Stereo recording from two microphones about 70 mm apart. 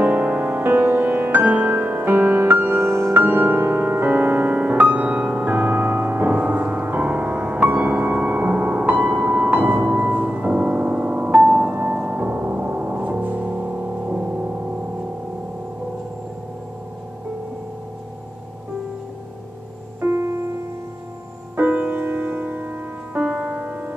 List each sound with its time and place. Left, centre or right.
0.0 s music: right
3.2 s music: right
20.0 s music: right
21.5 s music: right